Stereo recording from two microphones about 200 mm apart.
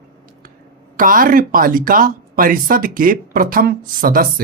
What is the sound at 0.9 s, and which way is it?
Speech, 45° right (ahead or behind).